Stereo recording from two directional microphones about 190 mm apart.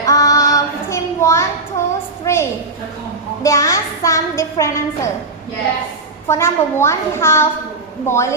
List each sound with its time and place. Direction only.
0.0 s child singing: 20° left (ahead or behind)
2.2 s a sound: 15° left (ahead or behind)
6.2 s a child's voice: 15° left (ahead or behind)